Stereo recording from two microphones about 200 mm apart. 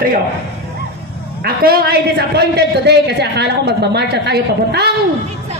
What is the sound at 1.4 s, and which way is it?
A man's voice, 50° right (ahead or behind).